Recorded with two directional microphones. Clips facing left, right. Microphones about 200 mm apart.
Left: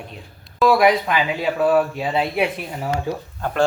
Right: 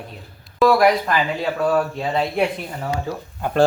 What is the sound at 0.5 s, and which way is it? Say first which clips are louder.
Speech: even; centre (ahead or behind).